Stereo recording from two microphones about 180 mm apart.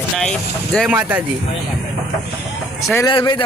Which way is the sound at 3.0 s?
25° left (ahead or behind).